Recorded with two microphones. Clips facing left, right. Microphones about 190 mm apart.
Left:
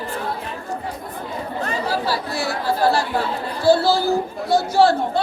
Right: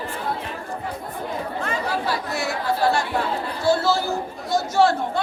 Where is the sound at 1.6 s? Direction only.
35° left (ahead or behind).